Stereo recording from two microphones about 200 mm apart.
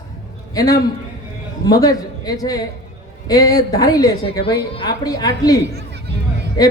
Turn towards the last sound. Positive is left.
turn(degrees=20)  # may be behind; listen again after turning